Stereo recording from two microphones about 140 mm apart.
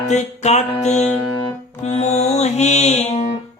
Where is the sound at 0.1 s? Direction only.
55° left (ahead or behind).